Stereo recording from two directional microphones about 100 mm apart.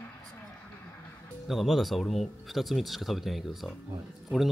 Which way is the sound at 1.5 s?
Centre (ahead or behind).